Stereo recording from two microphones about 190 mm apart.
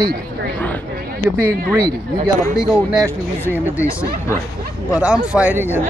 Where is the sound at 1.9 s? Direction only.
20° right (ahead or behind).